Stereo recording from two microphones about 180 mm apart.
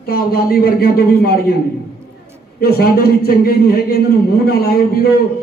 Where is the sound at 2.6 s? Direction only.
60° left (ahead or behind).